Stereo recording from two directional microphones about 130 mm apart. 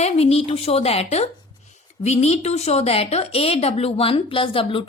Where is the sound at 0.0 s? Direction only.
50° left (ahead or behind).